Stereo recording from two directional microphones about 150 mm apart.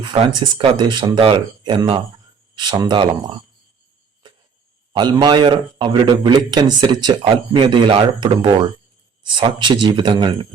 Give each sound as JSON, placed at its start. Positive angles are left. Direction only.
{"t": 0.0, "sound": "a man's voice", "side_deg": -30}
{"t": 5.1, "sound": "a man's voice", "side_deg": -30}